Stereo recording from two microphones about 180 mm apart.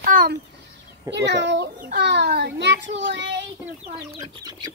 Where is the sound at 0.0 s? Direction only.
55° right (ahead or behind).